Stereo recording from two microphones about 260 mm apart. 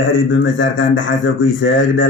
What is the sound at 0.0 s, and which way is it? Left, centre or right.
Speech, left.